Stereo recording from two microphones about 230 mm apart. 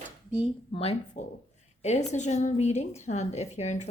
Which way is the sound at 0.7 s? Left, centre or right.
Left.